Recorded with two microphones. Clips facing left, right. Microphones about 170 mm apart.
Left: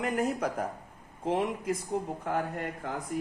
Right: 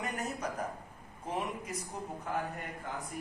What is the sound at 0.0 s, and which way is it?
A man's voice, 55° left (ahead or behind).